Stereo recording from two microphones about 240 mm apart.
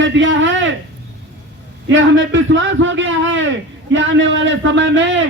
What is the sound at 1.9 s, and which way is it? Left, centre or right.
A man's voice, right.